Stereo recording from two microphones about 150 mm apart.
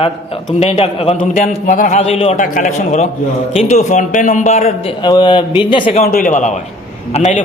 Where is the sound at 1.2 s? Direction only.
60° left (ahead or behind).